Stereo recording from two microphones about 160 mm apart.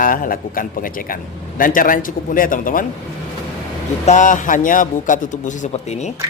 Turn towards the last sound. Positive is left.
turn(degrees=45)  # may be behind; listen again after turning